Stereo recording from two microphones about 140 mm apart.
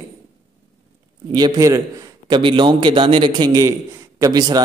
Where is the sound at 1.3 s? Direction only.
25° right (ahead or behind).